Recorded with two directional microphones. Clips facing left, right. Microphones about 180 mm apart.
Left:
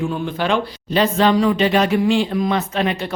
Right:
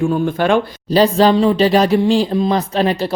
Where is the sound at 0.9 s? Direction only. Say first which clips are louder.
Right 4 dB; 35° right (ahead or behind).